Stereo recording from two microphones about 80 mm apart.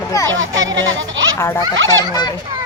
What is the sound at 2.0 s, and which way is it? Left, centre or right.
Speech, left.